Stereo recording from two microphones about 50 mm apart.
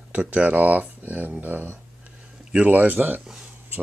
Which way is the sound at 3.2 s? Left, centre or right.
Centre.